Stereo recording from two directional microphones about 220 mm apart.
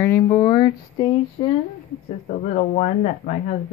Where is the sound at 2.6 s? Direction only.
30° left (ahead or behind).